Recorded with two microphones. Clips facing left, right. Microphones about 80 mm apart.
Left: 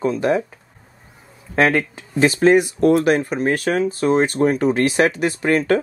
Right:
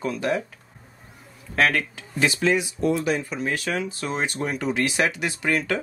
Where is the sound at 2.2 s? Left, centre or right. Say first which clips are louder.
Left 8 dB; left.